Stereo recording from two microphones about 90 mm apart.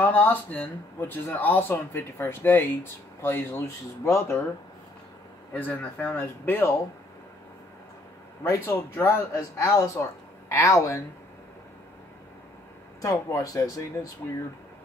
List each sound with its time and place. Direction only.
0.0 s speech: 20° left (ahead or behind)
5.5 s speech: 20° left (ahead or behind)
8.5 s speech: 30° left (ahead or behind)
13.0 s speech: 40° left (ahead or behind)